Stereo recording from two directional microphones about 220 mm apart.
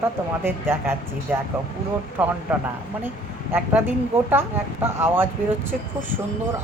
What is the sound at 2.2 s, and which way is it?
Speech, 10° right (ahead or behind).